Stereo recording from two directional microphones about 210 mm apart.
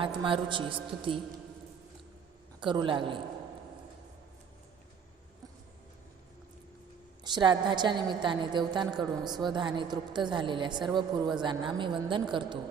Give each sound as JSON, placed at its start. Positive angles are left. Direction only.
{"t": 0.2, "sound": "a woman's voice", "side_deg": -25}
{"t": 2.6, "sound": "a woman's voice", "side_deg": -20}
{"t": 7.3, "sound": "a woman's voice", "side_deg": -20}